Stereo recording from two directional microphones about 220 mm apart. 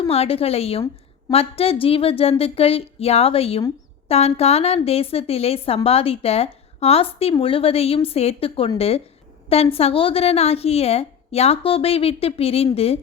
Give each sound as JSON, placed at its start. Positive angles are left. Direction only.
{"t": 0.1, "sound": "a woman's voice", "side_deg": 25}